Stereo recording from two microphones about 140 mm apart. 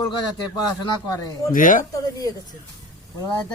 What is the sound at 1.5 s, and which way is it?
Speech, 75° left (ahead or behind).